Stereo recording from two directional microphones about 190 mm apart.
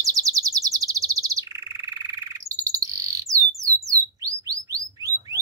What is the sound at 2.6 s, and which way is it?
Bird, 15° right (ahead or behind).